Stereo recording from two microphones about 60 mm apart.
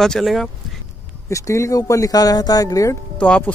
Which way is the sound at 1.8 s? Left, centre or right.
Left.